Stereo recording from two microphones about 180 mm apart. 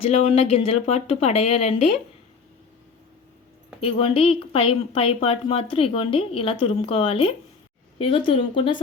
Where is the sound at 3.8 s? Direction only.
30° left (ahead or behind).